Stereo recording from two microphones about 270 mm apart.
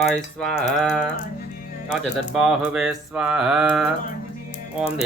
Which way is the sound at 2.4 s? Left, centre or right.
Centre.